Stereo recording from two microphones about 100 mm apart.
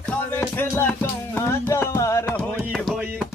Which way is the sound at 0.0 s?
15° left (ahead or behind).